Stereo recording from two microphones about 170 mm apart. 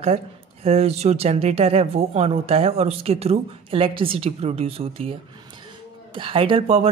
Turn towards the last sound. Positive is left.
turn(degrees=-35)  # may be behind; listen again after turning